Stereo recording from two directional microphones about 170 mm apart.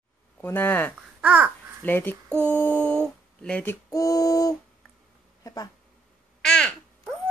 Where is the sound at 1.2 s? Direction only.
5° right (ahead or behind).